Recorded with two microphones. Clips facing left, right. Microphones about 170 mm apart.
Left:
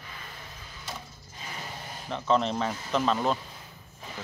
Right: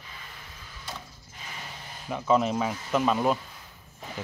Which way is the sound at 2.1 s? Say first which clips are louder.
Right 2 dB; 5° right (ahead or behind).